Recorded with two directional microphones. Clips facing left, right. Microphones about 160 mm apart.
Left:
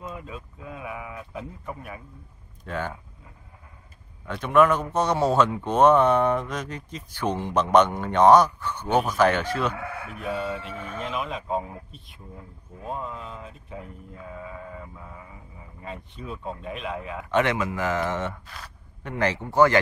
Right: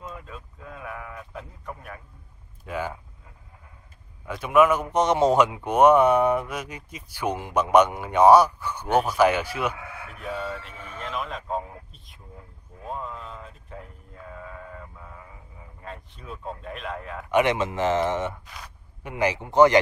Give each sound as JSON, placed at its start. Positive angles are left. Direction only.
{"t": 0.0, "sound": "a sound", "side_deg": 5}
{"t": 2.6, "sound": "speech", "side_deg": -10}
{"t": 4.3, "sound": "speech", "side_deg": -10}
{"t": 10.3, "sound": "speech", "side_deg": 5}
{"t": 15.8, "sound": "speech", "side_deg": 5}
{"t": 17.3, "sound": "speech", "side_deg": -15}
{"t": 18.2, "sound": "speech", "side_deg": -15}